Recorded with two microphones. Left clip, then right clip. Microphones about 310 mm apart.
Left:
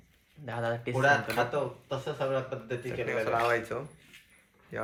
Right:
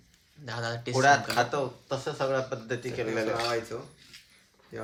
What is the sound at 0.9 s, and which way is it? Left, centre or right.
Speech, right.